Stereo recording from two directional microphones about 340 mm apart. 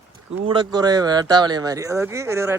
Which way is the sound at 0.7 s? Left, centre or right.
Centre.